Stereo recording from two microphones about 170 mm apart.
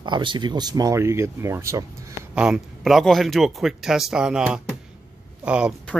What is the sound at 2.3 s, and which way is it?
Speech, 5° right (ahead or behind).